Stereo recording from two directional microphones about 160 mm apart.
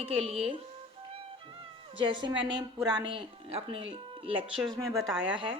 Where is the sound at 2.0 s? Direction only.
30° right (ahead or behind).